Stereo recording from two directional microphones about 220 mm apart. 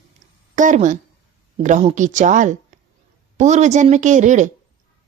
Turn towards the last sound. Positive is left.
turn(degrees=-35)  # may be behind; listen again after turning